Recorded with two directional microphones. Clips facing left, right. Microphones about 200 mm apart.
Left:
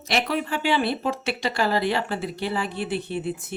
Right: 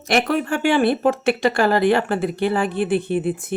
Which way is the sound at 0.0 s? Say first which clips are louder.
Right 6 dB; 50° right (ahead or behind).